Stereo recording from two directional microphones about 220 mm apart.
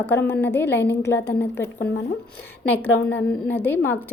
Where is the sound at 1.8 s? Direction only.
50° left (ahead or behind).